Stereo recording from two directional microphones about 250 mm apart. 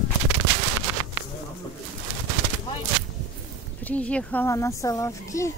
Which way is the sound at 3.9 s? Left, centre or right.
Centre.